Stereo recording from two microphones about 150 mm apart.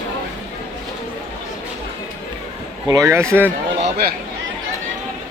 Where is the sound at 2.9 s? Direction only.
20° right (ahead or behind).